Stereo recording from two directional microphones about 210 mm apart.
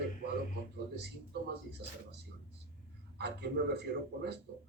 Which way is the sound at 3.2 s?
50° right (ahead or behind).